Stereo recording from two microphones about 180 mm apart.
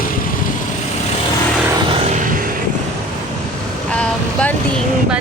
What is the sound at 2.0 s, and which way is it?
Vehicle, 50° right (ahead or behind).